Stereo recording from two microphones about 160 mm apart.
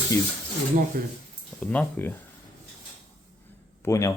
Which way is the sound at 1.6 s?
10° left (ahead or behind).